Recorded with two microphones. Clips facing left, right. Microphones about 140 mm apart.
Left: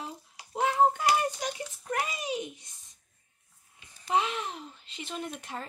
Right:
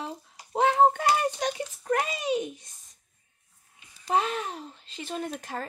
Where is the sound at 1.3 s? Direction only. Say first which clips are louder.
Right 5 dB; 70° right (ahead or behind).